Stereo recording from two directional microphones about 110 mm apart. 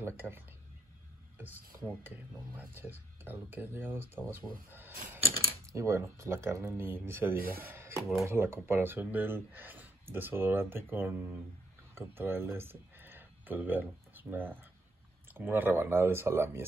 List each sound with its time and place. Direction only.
0.2 s speech: 10° right (ahead or behind)
2.0 s speech: 15° right (ahead or behind)